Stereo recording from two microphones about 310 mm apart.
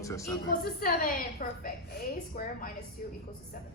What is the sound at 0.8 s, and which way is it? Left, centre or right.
A woman's voice, left.